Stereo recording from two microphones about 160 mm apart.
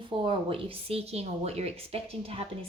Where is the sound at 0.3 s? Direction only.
35° right (ahead or behind).